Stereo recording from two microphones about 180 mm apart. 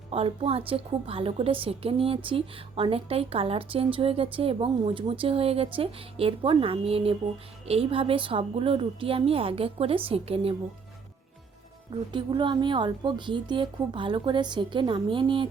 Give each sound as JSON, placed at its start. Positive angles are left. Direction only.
{"t": 0.1, "sound": "a woman's voice", "side_deg": -30}
{"t": 12.1, "sound": "a woman's voice", "side_deg": -25}